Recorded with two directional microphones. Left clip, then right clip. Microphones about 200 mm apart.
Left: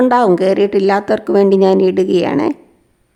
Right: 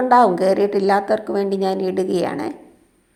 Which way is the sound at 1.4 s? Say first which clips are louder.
Left 10 dB; 45° left (ahead or behind).